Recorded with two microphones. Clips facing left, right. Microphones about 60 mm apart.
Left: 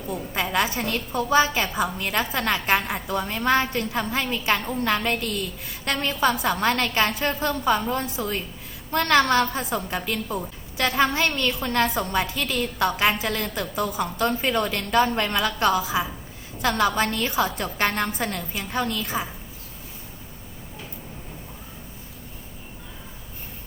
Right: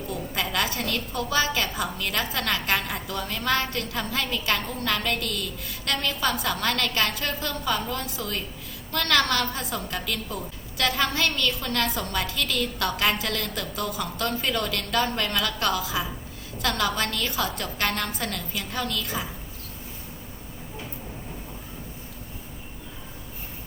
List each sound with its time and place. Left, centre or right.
0.3 s a woman's voice: left